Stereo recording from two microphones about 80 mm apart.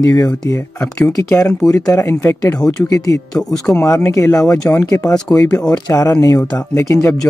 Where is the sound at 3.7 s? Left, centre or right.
Left.